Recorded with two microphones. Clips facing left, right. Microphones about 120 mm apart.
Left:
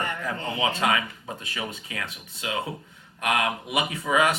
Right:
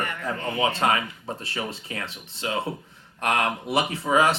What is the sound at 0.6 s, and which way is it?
Speech, 30° right (ahead or behind).